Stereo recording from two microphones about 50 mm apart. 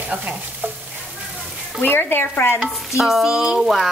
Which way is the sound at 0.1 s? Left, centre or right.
Right.